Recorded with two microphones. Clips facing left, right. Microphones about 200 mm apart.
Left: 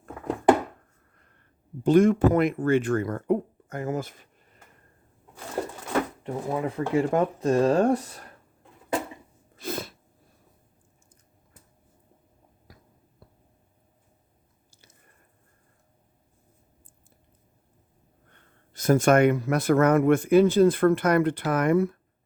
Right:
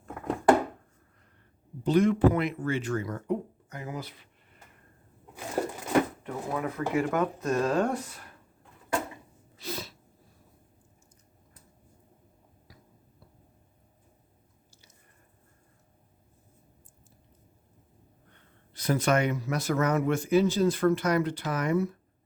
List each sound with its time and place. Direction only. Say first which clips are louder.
1.8 s speech: left 4 dB; 50° left (ahead or behind)
5.6 s a sound: right 1 dB; 10° right (ahead or behind)
6.2 s speech: left 4 dB; 30° left (ahead or behind)
9.6 s sneeze: left 5 dB; 50° left (ahead or behind)
18.7 s speech: left 6 dB; 45° left (ahead or behind)